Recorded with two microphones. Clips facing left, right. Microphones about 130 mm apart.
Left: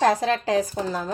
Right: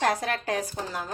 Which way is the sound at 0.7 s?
40° left (ahead or behind).